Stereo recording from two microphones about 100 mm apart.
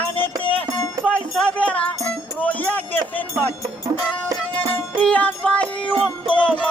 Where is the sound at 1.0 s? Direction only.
15° left (ahead or behind).